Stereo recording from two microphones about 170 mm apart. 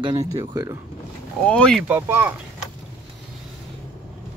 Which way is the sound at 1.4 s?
5° left (ahead or behind).